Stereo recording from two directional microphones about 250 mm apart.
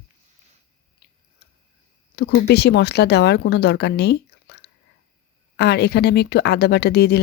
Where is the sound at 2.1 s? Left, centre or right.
Left.